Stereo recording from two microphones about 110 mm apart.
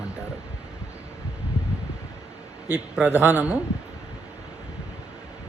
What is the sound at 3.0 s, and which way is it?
Speech, 20° left (ahead or behind).